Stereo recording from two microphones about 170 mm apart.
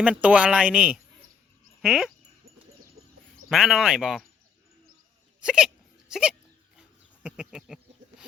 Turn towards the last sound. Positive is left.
turn(degrees=-5)  # may be behind; listen again after turning